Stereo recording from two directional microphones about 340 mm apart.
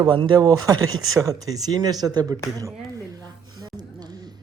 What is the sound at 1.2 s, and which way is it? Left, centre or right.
Speech, centre.